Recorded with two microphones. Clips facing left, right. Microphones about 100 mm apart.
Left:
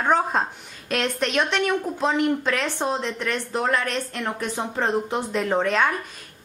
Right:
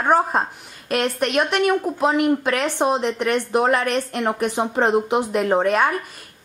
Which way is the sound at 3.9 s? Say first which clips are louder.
Right 6 dB; 15° right (ahead or behind).